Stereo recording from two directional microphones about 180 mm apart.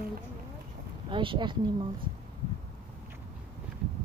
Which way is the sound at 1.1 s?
25° right (ahead or behind).